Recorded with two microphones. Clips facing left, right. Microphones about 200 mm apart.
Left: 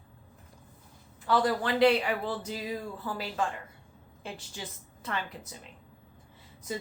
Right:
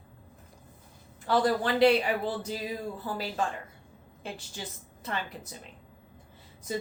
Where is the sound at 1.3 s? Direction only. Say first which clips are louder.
Right 1 dB; 35° right (ahead or behind).